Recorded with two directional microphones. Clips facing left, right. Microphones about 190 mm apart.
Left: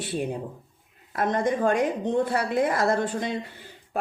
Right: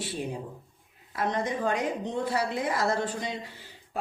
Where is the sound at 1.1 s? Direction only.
50° left (ahead or behind).